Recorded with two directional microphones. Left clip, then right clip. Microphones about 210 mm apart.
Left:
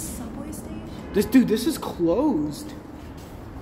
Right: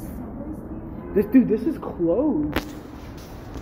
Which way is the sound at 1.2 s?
10° left (ahead or behind).